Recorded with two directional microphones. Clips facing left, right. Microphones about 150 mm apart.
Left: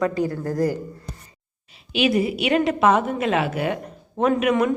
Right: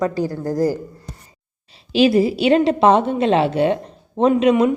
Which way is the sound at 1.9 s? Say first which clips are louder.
Right 6 dB; 30° right (ahead or behind).